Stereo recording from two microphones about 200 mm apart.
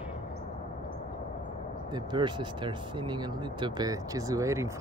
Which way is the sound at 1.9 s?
20° right (ahead or behind).